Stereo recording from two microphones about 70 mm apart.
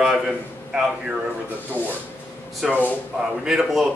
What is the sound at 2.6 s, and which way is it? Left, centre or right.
Speech, centre.